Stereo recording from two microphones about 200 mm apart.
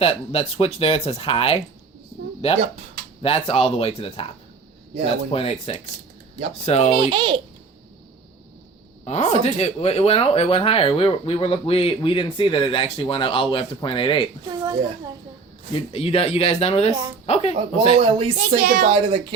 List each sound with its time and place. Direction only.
0.0 s speech: 30° left (ahead or behind)
3.2 s speech: 30° left (ahead or behind)
5.3 s speech: 30° left (ahead or behind)
6.9 s a child's voice: 25° right (ahead or behind)
9.0 s speech: 35° left (ahead or behind)
14.5 s a child's voice: 20° right (ahead or behind)
15.9 s speech: 30° left (ahead or behind)
18.0 s a child's voice: 25° right (ahead or behind)
18.3 s a woman's voice: 40° right (ahead or behind)
18.9 s a child's voice: 25° right (ahead or behind)